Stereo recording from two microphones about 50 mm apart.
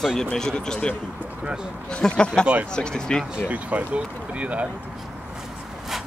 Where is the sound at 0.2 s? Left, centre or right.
Centre.